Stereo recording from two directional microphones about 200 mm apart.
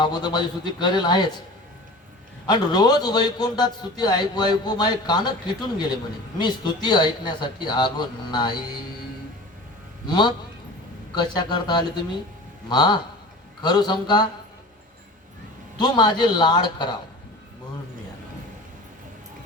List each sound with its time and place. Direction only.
0.0 s a man's voice: 20° left (ahead or behind)
2.5 s a man's voice: 20° left (ahead or behind)
10.1 s a man's voice: 20° left (ahead or behind)
15.8 s a man's voice: 20° left (ahead or behind)